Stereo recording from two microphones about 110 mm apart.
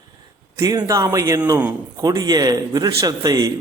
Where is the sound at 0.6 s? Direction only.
35° right (ahead or behind).